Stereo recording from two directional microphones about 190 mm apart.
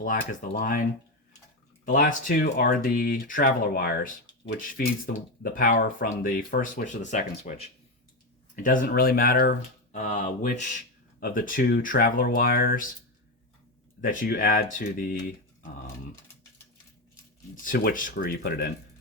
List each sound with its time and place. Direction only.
0.0 s speech: 45° left (ahead or behind)
14.0 s speech: 45° left (ahead or behind)
17.5 s speech: 45° left (ahead or behind)